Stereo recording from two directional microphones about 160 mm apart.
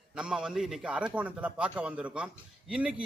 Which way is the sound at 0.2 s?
5° right (ahead or behind).